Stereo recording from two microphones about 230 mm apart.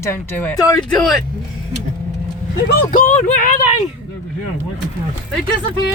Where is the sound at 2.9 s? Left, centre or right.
Left.